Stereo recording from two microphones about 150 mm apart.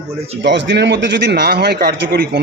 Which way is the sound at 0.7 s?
90° right.